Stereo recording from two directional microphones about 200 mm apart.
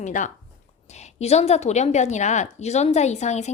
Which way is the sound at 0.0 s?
40° left (ahead or behind).